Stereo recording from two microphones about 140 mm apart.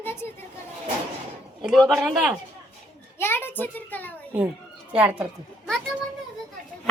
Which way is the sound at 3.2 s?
15° left (ahead or behind).